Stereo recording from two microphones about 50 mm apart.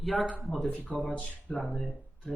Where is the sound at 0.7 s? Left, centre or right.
Left.